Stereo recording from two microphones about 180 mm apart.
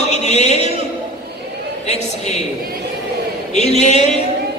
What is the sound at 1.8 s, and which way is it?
Speech, 35° left (ahead or behind).